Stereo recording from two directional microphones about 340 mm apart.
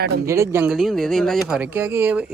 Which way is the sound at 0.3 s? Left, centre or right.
Centre.